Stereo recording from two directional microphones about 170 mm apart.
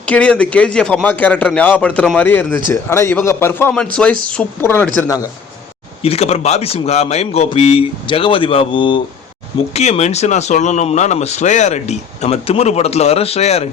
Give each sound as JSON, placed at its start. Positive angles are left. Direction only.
{"t": 0.0, "sound": "a man's voice", "side_deg": 10}
{"t": 6.0, "sound": "speech", "side_deg": 35}
{"t": 9.7, "sound": "speech", "side_deg": 40}